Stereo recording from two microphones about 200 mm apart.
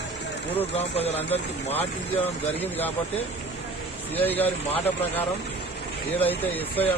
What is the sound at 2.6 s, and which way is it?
Speech, 10° left (ahead or behind).